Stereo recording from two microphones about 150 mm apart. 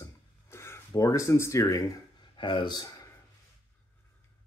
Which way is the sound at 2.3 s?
35° left (ahead or behind).